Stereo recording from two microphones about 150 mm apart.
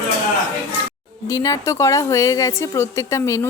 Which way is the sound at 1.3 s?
20° left (ahead or behind).